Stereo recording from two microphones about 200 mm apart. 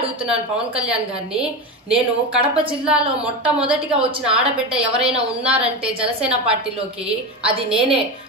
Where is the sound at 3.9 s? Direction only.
30° right (ahead or behind).